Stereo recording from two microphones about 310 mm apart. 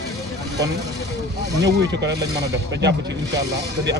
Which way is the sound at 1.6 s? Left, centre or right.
Right.